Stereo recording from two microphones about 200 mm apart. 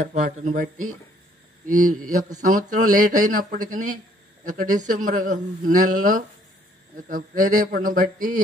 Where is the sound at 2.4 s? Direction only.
45° right (ahead or behind).